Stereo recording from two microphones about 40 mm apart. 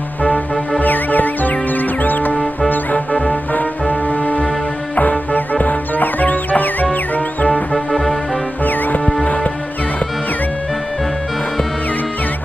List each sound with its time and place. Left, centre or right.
0.2 s music: left
0.8 s music: left
4.1 s music: left
7.7 s music: centre
8.6 s music: left
9.2 s music: left